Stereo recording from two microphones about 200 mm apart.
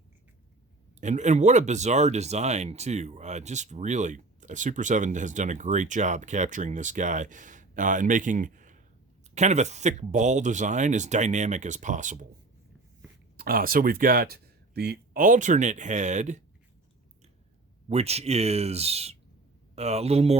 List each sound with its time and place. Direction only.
1.0 s speech: 35° right (ahead or behind)
13.3 s speech: 50° right (ahead or behind)
17.8 s speech: 30° right (ahead or behind)